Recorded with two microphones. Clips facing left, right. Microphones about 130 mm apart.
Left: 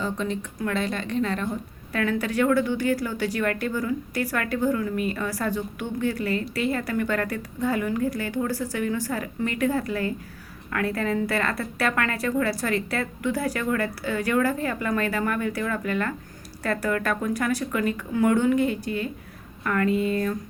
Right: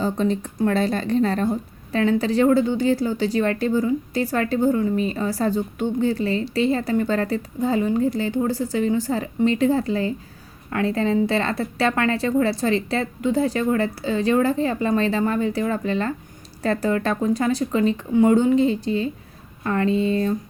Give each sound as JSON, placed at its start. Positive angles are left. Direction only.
{"t": 0.0, "sound": "a woman's voice", "side_deg": -35}